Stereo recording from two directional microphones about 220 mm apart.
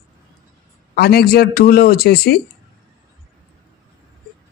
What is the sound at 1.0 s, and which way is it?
Speech, 45° left (ahead or behind).